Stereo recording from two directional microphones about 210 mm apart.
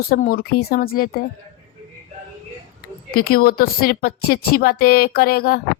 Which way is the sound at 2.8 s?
45° left (ahead or behind).